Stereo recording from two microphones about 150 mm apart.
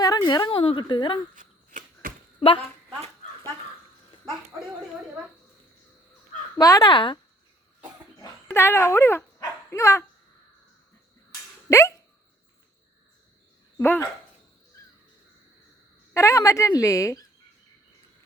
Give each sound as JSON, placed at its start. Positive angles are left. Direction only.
{"t": 0.0, "sound": "a woman's voice", "side_deg": 25}
{"t": 1.4, "sound": "a sound", "side_deg": -65}
{"t": 6.6, "sound": "a woman's voice", "side_deg": 25}
{"t": 8.2, "sound": "dog", "side_deg": 15}
{"t": 11.7, "sound": "a sound", "side_deg": 20}
{"t": 13.7, "sound": "speech", "side_deg": 15}
{"t": 16.1, "sound": "a woman's voice", "side_deg": 20}